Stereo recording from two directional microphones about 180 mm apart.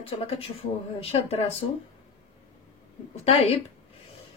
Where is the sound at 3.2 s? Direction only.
35° left (ahead or behind).